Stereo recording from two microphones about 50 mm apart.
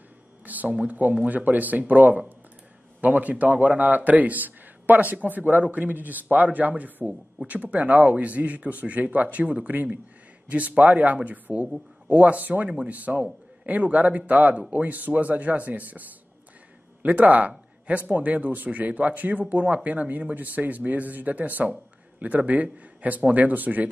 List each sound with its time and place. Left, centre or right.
0.5 s a man's voice: right
17.0 s a man's voice: right